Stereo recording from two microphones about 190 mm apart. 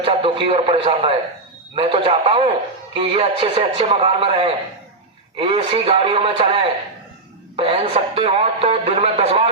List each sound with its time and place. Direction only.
0.0 s a man's voice: 25° right (ahead or behind)